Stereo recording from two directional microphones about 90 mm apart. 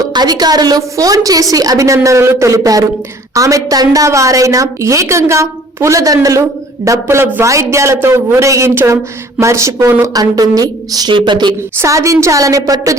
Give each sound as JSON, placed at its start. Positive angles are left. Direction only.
{"t": 0.1, "sound": "a woman's voice", "side_deg": -50}
{"t": 11.1, "sound": "speech", "side_deg": -60}
{"t": 11.8, "sound": "a woman's voice", "side_deg": -35}